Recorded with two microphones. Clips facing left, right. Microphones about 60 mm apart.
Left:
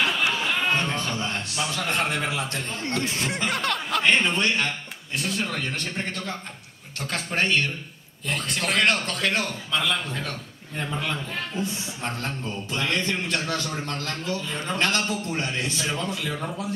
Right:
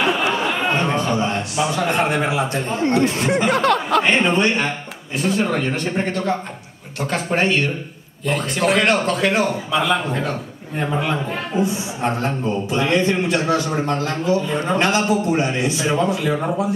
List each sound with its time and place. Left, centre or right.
0.2 s chatter: right
0.5 s a man's voice: centre
4.0 s a man's voice: right
5.1 s a man's voice: centre; by 16.6 s right